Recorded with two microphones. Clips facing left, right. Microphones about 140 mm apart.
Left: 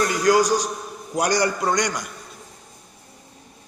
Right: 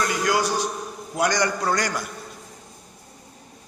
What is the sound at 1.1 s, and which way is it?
Speech, 35° left (ahead or behind).